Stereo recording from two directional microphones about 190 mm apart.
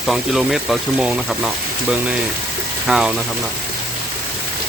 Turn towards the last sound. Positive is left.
turn(degrees=0)  # may be behind; listen again after turning